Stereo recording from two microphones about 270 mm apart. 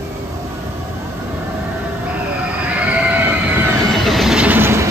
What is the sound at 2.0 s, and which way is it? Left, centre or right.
Train, centre.